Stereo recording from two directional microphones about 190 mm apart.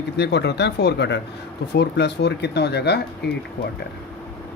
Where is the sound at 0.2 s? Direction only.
60° left (ahead or behind).